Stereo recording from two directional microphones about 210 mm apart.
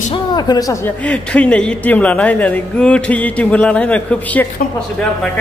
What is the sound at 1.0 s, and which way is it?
Speech, 5° left (ahead or behind).